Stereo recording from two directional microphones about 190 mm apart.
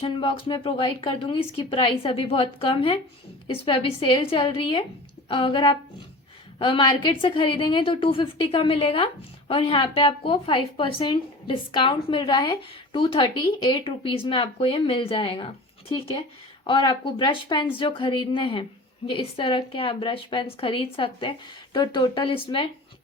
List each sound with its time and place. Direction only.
0.0 s a woman's voice: 25° left (ahead or behind)